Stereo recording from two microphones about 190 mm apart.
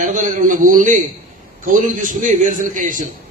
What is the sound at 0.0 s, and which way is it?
A man's voice, 40° right (ahead or behind).